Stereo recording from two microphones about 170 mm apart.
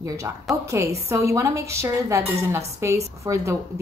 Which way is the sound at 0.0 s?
20° right (ahead or behind).